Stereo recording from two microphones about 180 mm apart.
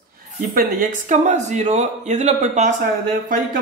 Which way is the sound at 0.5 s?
50° right (ahead or behind).